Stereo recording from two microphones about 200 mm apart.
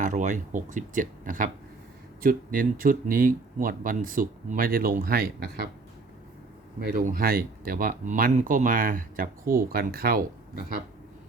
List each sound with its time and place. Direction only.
0.0 s speech: 40° right (ahead or behind)
6.7 s speech: 45° right (ahead or behind)